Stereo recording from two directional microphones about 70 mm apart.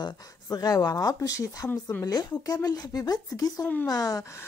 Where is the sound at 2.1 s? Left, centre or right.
Left.